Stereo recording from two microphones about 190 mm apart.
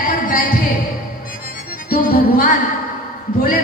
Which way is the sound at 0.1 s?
50° left (ahead or behind).